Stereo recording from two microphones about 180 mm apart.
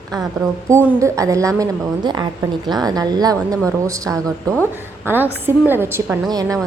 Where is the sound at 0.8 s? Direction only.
15° right (ahead or behind).